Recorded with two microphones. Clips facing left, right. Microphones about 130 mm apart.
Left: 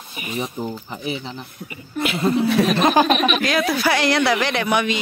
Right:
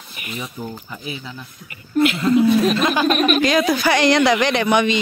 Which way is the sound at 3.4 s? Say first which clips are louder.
Right 3 dB; 5° left (ahead or behind).